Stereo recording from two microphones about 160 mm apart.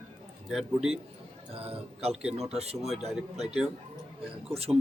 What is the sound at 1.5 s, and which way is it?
Speech, 35° right (ahead or behind).